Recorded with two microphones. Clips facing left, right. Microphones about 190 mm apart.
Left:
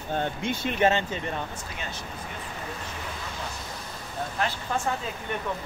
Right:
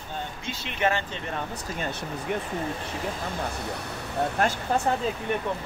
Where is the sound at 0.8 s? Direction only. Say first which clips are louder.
Left 2 dB; 20° left (ahead or behind).